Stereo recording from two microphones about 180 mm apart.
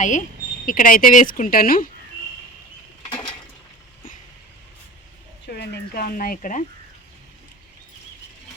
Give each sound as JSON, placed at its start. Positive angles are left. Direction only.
{"t": 0.0, "sound": "speech", "side_deg": 45}
{"t": 5.5, "sound": "a sound", "side_deg": 60}
{"t": 5.9, "sound": "speech", "side_deg": 55}